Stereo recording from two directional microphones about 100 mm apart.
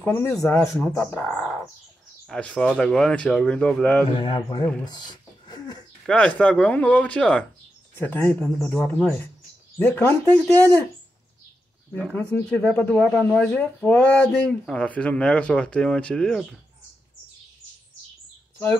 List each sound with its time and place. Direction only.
0.0 s speech: 25° left (ahead or behind)
2.2 s speech: 5° left (ahead or behind)
4.1 s speech: 65° left (ahead or behind)
4.8 s a sound: 45° left (ahead or behind)
6.0 s speech: 10° left (ahead or behind)
11.9 s speech: 10° left (ahead or behind)
12.9 s speech: 5° right (ahead or behind)